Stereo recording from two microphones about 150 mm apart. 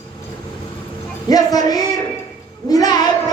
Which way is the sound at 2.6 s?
25° left (ahead or behind).